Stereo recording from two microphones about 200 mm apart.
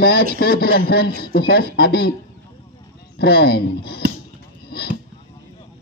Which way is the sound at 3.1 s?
55° left (ahead or behind).